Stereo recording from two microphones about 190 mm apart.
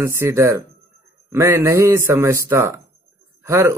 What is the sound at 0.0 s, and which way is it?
Speech, 15° right (ahead or behind).